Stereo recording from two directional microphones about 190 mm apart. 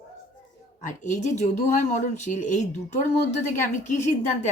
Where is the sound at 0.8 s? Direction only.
40° left (ahead or behind).